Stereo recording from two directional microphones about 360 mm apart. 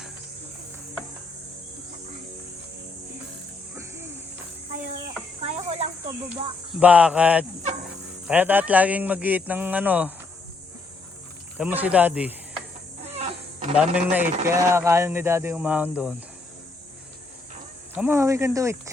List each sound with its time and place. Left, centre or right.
5.4 s a sound: centre
6.7 s speech: centre
11.5 s speech: centre
13.1 s a sound: centre
13.7 s speech: centre
17.9 s speech: centre